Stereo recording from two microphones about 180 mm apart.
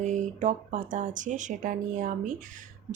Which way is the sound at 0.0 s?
40° right (ahead or behind).